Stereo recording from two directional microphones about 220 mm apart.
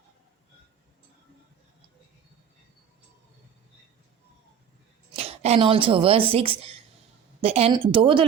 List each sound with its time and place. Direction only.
5.1 s speech: 25° right (ahead or behind)